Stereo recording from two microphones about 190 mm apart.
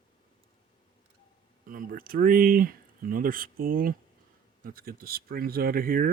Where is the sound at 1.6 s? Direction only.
50° right (ahead or behind).